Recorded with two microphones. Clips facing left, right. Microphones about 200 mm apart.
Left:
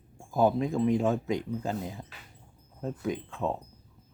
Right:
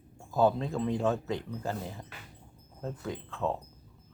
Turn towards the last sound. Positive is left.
turn(degrees=15)  # may be behind; listen again after turning